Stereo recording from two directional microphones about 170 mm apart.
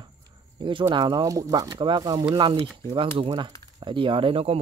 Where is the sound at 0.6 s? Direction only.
30° right (ahead or behind).